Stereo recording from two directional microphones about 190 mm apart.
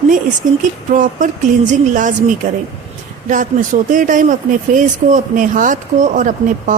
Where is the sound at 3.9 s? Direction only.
45° right (ahead or behind).